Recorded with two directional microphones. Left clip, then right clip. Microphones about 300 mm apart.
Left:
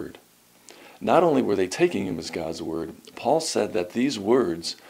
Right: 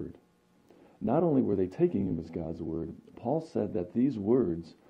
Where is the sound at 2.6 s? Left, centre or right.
Centre.